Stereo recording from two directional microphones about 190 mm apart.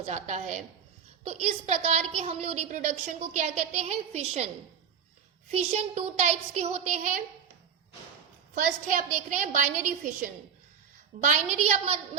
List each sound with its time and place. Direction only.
0.0 s a woman's voice: 35° right (ahead or behind)
5.5 s a woman's voice: 35° right (ahead or behind)
8.5 s a woman's voice: 40° right (ahead or behind)
11.3 s a woman's voice: 40° right (ahead or behind)